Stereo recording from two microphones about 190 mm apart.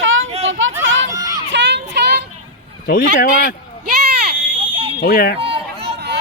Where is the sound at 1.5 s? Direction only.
65° right (ahead or behind).